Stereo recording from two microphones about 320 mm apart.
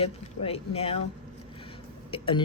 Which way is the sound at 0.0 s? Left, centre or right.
Centre.